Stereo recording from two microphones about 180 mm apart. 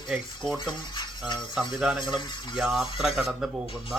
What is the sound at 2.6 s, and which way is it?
Speech, centre (ahead or behind).